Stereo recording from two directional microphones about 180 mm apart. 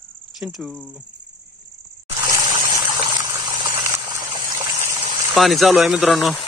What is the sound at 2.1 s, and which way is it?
Water, 20° right (ahead or behind).